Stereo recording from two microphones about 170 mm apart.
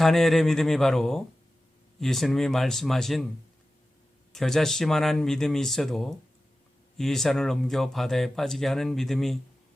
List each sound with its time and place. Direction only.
0.0 s speech: centre (ahead or behind)
4.3 s speech: centre (ahead or behind)